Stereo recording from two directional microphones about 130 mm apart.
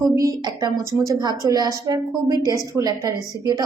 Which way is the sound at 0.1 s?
25° right (ahead or behind).